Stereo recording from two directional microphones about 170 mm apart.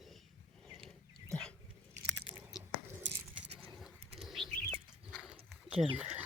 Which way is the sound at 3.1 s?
90° right.